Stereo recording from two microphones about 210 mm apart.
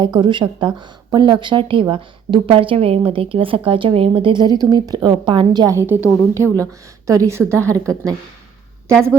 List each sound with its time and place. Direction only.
0.0 s a woman's voice: 20° right (ahead or behind)
6.4 s speech: 10° left (ahead or behind)
6.7 s a woman's voice: 15° right (ahead or behind)